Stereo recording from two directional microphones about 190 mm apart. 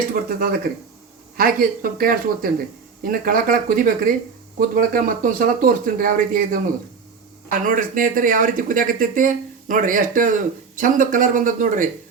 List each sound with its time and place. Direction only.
0.1 s speech: 50° right (ahead or behind)
7.6 s speech: 45° right (ahead or behind)